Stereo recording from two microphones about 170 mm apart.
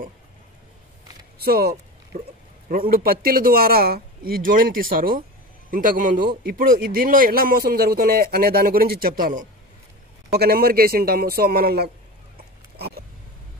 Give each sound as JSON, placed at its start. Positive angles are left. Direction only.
{"t": 1.4, "sound": "a sound", "side_deg": -65}
{"t": 2.7, "sound": "a man's voice", "side_deg": -60}
{"t": 10.3, "sound": "a man's voice", "side_deg": -65}